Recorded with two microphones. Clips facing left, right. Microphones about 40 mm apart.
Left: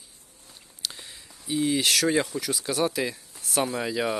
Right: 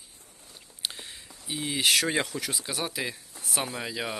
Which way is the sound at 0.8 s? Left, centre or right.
Right.